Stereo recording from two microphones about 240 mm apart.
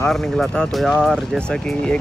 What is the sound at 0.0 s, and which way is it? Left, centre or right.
Speech, centre.